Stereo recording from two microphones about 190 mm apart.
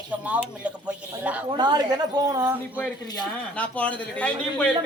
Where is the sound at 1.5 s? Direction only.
20° right (ahead or behind).